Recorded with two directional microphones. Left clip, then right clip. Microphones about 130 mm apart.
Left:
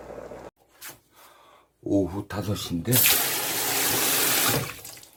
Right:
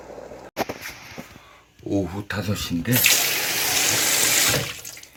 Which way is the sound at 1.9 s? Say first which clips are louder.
Even; 25° left (ahead or behind).